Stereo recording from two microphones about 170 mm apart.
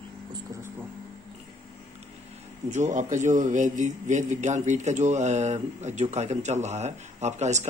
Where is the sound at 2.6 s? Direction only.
45° right (ahead or behind).